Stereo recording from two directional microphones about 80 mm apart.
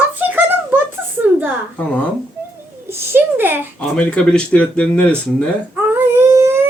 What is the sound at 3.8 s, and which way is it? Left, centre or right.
Speech, centre.